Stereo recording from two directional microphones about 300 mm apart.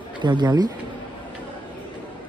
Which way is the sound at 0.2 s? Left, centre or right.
Centre.